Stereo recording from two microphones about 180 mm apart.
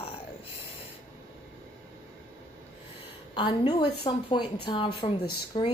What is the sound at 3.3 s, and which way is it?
Speech, 25° left (ahead or behind).